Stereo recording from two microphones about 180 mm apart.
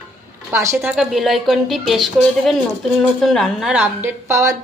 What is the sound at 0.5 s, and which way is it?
A woman's voice, 15° right (ahead or behind).